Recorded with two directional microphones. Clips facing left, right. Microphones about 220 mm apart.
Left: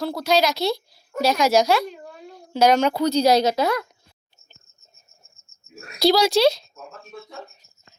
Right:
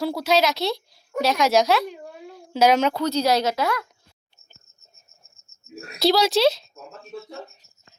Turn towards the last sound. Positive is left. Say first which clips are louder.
# left 1 dB
turn(degrees=0)  # may be behind; listen again after turning